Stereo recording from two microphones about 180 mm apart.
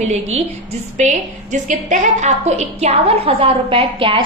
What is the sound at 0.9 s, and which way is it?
A woman's voice, 40° right (ahead or behind).